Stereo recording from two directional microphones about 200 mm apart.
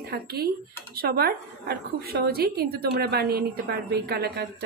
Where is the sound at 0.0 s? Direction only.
50° right (ahead or behind).